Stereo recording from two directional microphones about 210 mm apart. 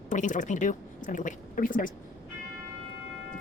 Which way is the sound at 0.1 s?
35° left (ahead or behind).